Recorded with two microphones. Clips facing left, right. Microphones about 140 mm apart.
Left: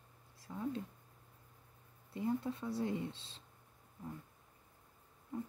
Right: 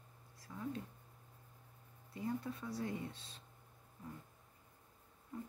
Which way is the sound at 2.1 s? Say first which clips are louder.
Left 4 dB; 25° left (ahead or behind).